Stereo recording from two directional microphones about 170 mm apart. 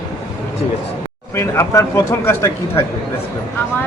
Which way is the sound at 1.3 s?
15° left (ahead or behind).